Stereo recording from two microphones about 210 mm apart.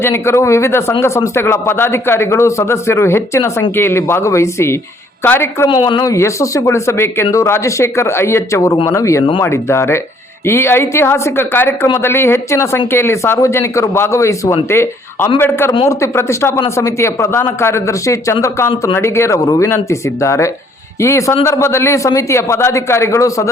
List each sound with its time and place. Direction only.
0.0 s speech: 10° left (ahead or behind)
5.6 s speech: 20° left (ahead or behind)